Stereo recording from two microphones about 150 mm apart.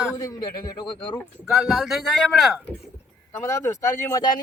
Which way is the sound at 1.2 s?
Centre (ahead or behind).